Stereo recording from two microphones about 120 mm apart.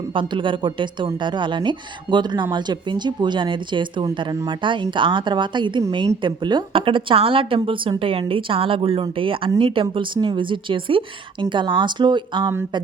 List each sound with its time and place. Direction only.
0.1 s a woman's voice: 45° right (ahead or behind)